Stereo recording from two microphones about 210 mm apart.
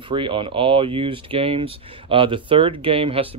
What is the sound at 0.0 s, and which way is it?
Speech, 25° right (ahead or behind).